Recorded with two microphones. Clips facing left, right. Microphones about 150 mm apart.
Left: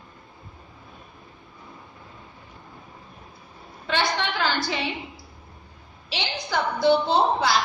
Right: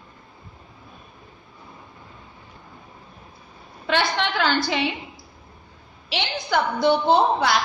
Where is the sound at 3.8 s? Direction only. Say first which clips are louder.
Right 2 dB; 70° right (ahead or behind).